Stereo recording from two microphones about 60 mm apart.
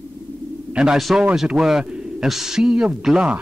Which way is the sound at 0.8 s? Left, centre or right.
Centre.